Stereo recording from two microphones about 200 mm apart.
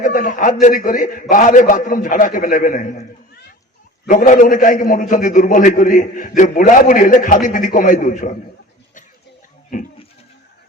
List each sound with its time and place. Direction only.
0.0 s a man's voice: 40° left (ahead or behind)
4.1 s a man's voice: 40° left (ahead or behind)
9.7 s a man's voice: 40° left (ahead or behind)